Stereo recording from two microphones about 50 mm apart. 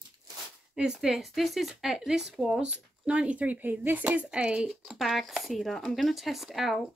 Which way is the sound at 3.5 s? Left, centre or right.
Right.